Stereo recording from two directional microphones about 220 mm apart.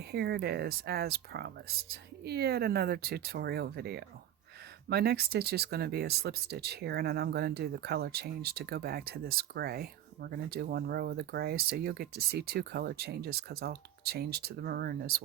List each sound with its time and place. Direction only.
0.1 s speech: 45° right (ahead or behind)